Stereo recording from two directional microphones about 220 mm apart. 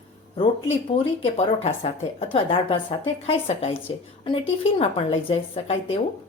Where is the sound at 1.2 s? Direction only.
25° left (ahead or behind).